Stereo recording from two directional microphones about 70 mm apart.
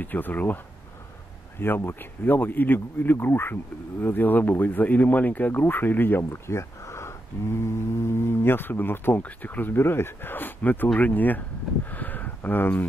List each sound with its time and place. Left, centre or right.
0.0 s speech: left
1.6 s speech: left
11.9 s a sound: left